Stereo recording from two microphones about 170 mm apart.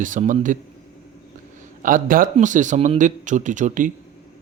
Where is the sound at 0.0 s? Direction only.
50° right (ahead or behind).